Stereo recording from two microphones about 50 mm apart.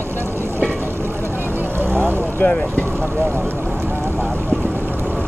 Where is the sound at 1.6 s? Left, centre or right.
Right.